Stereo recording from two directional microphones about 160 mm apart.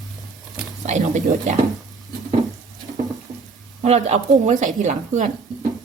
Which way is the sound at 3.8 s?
45° right (ahead or behind).